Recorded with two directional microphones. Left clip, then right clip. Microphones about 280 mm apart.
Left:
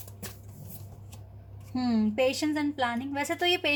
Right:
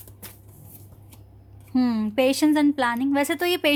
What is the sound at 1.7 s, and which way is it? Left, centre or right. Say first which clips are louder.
A woman's voice: right 5 dB; right.